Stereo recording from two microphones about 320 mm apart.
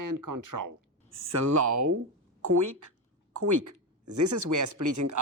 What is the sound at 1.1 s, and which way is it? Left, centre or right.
Speech, right.